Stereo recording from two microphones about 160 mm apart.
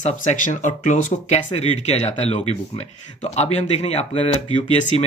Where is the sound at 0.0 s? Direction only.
50° left (ahead or behind).